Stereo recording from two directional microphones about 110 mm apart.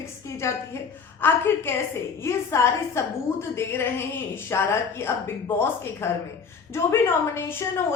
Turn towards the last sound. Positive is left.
turn(degrees=25)  # may be behind; listen again after turning